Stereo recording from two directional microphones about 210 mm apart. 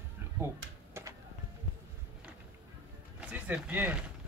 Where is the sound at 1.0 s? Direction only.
10° right (ahead or behind).